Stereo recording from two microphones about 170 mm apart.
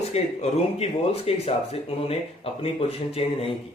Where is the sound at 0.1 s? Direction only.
40° left (ahead or behind).